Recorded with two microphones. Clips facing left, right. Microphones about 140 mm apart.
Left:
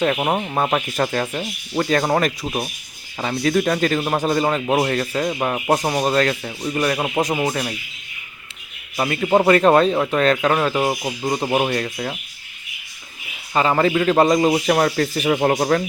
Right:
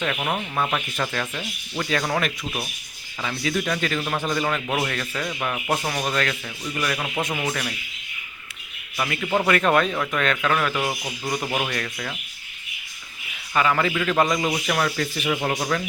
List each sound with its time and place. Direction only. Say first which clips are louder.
0.0 s a man's voice: left 7 dB; 35° left (ahead or behind)
9.0 s a man's voice: left 7 dB; 35° left (ahead or behind)
13.5 s a man's voice: left 4 dB; 30° left (ahead or behind)